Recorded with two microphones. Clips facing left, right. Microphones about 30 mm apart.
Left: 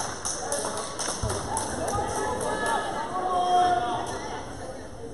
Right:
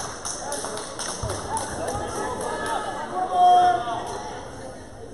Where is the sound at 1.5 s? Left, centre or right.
Right.